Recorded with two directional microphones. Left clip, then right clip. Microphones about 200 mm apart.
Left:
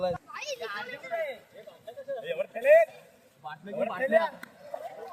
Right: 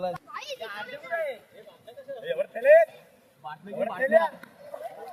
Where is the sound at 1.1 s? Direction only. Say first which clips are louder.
Right 3 dB; 10° right (ahead or behind).